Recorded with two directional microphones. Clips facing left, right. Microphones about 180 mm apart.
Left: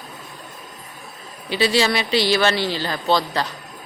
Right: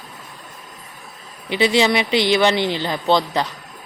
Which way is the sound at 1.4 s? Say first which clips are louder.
Right 2 dB; 20° right (ahead or behind).